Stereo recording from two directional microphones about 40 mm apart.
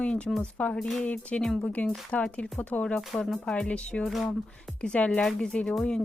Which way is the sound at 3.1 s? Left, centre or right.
Left.